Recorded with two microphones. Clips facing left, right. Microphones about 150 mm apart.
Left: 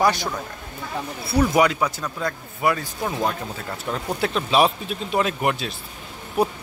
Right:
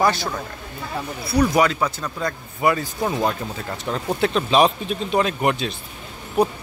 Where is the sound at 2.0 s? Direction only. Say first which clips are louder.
Right 1 dB; centre (ahead or behind).